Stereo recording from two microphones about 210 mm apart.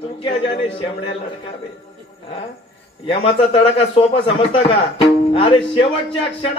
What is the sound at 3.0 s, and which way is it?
Speech, 25° left (ahead or behind).